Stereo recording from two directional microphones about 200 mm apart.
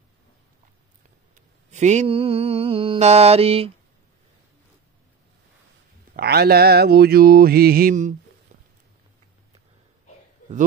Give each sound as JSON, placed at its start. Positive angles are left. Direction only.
{"t": 1.3, "sound": "mantra", "side_deg": -35}
{"t": 6.1, "sound": "mantra", "side_deg": -50}